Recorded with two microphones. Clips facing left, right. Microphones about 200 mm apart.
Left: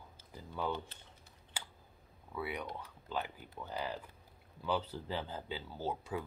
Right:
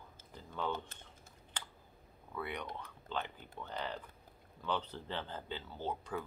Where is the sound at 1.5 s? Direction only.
10° left (ahead or behind).